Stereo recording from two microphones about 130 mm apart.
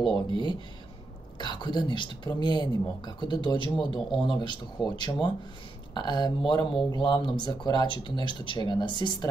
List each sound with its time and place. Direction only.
0.1 s speech: 35° left (ahead or behind)